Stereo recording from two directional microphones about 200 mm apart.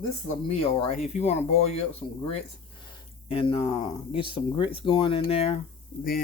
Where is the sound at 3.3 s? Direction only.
25° left (ahead or behind).